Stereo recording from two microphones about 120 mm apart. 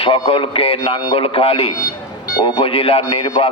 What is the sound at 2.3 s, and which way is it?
Speech, 35° left (ahead or behind).